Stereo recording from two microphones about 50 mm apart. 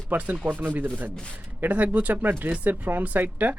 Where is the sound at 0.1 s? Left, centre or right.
Right.